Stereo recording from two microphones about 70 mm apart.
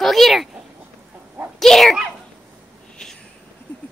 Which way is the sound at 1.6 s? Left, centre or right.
Centre.